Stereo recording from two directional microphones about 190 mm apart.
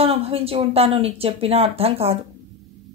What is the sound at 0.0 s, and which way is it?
Speech, 30° right (ahead or behind).